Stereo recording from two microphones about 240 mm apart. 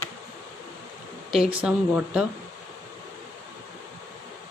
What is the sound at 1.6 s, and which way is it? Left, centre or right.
Speech, centre.